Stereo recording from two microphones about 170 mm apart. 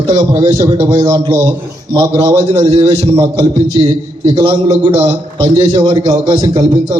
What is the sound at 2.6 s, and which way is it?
Speech, 35° right (ahead or behind).